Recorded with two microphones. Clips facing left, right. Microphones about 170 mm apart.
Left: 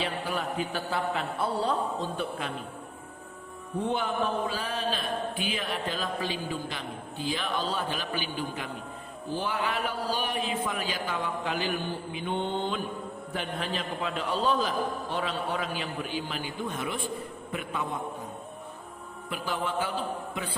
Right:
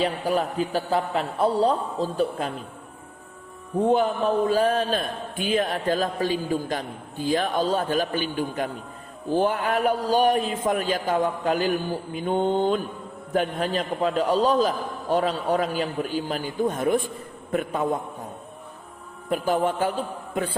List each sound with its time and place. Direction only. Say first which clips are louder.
0.0 s a woman's voice: right 8 dB; 40° right (ahead or behind)
3.8 s a woman's voice: right 8 dB; 40° right (ahead or behind)
19.3 s a man's voice: right 9 dB; 45° right (ahead or behind)